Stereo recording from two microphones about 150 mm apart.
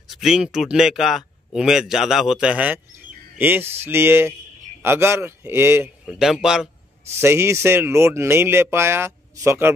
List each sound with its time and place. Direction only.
0.1 s speech: 5° right (ahead or behind)
6.0 s speech: centre (ahead or behind)
7.2 s speech: 15° right (ahead or behind)